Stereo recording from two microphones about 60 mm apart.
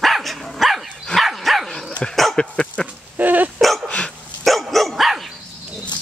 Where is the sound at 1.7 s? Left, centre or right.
Centre.